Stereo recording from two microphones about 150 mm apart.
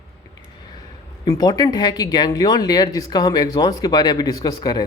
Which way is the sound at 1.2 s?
25° left (ahead or behind).